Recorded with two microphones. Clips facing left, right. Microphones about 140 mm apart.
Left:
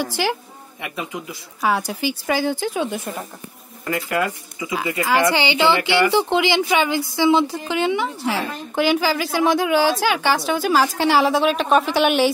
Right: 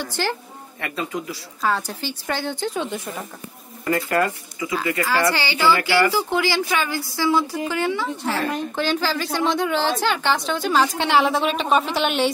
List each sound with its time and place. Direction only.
0.0 s speech: 10° left (ahead or behind)
4.6 s a woman's voice: 20° left (ahead or behind); by 12.3 s 5° left (ahead or behind)